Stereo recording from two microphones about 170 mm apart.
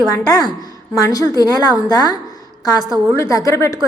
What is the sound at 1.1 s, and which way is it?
A woman's voice, 20° left (ahead or behind).